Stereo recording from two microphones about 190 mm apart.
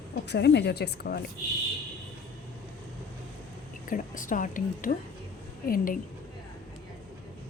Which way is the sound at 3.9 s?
45° left (ahead or behind).